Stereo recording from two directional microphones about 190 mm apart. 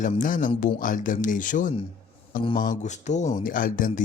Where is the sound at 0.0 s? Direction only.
45° left (ahead or behind).